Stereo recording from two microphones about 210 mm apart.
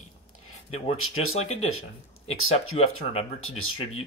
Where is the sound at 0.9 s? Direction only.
85° left.